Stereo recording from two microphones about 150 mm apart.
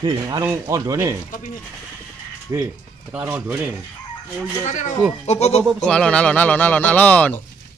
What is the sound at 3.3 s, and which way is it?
Speech, 10° right (ahead or behind).